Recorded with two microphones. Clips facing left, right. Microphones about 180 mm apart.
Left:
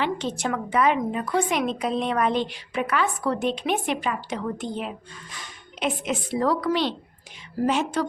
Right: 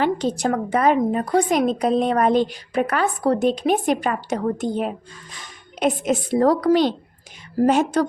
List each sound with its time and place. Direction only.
0.0 s a woman's voice: 40° right (ahead or behind)